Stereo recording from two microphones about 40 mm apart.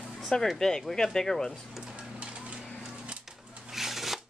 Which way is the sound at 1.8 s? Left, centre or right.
Right.